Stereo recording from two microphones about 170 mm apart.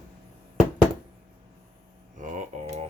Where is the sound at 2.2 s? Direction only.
45° right (ahead or behind).